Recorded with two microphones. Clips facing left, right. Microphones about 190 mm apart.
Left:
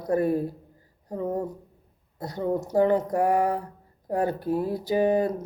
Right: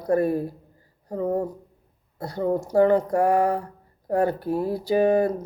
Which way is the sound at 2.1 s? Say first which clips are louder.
Right 3 dB; 20° left (ahead or behind).